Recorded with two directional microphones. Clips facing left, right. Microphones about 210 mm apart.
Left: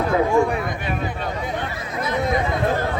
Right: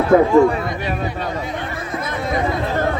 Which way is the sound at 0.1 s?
50° right (ahead or behind).